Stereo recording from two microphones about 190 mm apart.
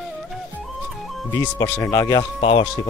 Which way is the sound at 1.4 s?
20° left (ahead or behind).